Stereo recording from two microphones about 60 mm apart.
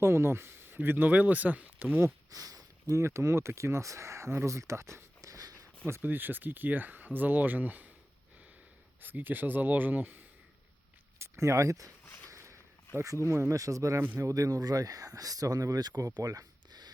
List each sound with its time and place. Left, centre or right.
0.0 s speech: right
2.3 s speech: right
2.9 s speech: right
5.2 s a sound: right
6.0 s speech: right
9.0 s speech: right
11.2 s speech: right
12.0 s walk: left
12.3 s a sound: right
13.0 s speech: right